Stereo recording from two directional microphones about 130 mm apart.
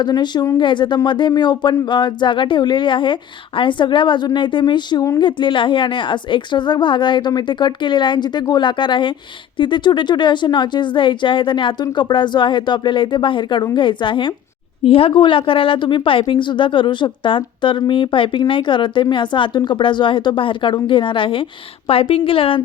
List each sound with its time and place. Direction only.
0.0 s a woman's voice: 35° left (ahead or behind)